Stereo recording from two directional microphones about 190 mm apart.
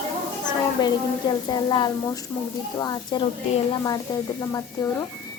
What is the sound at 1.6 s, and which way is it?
Speech, 20° left (ahead or behind).